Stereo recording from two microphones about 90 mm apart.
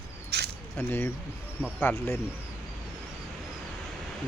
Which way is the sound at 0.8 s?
25° left (ahead or behind).